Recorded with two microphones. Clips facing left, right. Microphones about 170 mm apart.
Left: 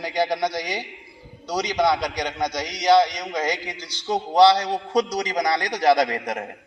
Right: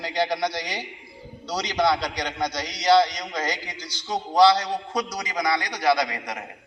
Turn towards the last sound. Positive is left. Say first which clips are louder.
# left 5 dB
turn(degrees=50)  # may be behind; listen again after turning